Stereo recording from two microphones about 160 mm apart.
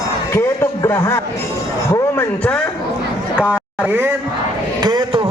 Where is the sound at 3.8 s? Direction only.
10° right (ahead or behind).